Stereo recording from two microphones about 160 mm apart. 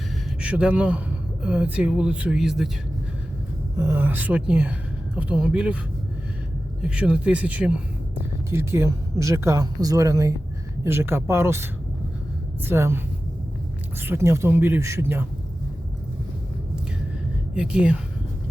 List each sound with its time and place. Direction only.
0.4 s a man's voice: 10° right (ahead or behind)
3.8 s a woman's voice: 15° right (ahead or behind)
6.8 s speech: 5° right (ahead or behind)
14.0 s speech: 15° right (ahead or behind)
17.5 s speech: 5° right (ahead or behind)